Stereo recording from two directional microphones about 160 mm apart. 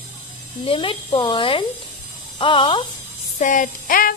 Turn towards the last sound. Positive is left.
turn(degrees=60)  # may be behind; listen again after turning